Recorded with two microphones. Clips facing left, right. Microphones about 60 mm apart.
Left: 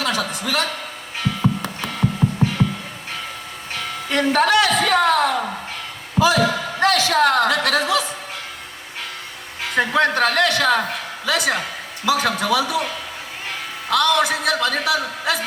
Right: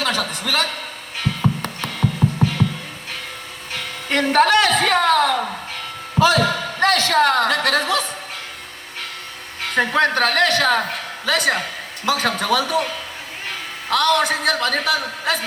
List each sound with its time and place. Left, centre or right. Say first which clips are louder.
0.0 s a sound: even; right
4.1 s a woman's voice: right 1 dB; right
9.6 s a man's voice: even; right
13.9 s a man's voice: even; right